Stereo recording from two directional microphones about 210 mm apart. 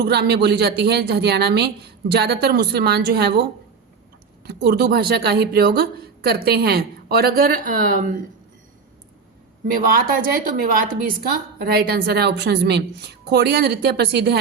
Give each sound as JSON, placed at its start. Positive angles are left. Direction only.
{"t": 0.0, "sound": "a woman's voice", "side_deg": -50}
{"t": 4.4, "sound": "a woman's voice", "side_deg": -50}
{"t": 9.6, "sound": "a woman's voice", "side_deg": -45}